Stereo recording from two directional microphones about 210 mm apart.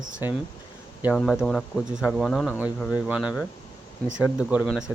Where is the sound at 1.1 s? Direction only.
5° left (ahead or behind).